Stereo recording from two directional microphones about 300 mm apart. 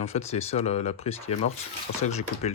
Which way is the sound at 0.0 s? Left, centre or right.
Left.